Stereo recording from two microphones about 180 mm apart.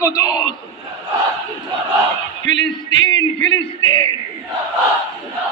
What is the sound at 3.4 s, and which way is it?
Speech, 25° left (ahead or behind).